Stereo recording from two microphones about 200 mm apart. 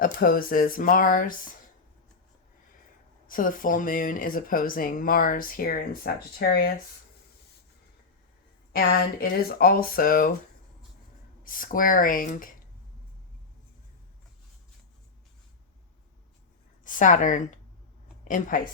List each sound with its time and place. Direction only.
0.0 s speech: 45° left (ahead or behind)
3.2 s speech: 45° left (ahead or behind)
8.7 s speech: 45° left (ahead or behind)
11.4 s speech: 45° left (ahead or behind)
16.8 s a woman's voice: 40° left (ahead or behind)